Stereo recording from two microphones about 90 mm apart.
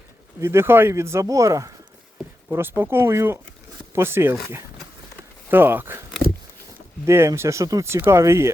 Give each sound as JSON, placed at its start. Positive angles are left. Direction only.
{"t": 0.3, "sound": "speech", "side_deg": -30}
{"t": 2.5, "sound": "speech", "side_deg": -25}
{"t": 7.0, "sound": "speech", "side_deg": -30}